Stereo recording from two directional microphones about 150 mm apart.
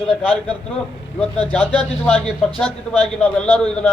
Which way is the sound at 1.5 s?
10° left (ahead or behind).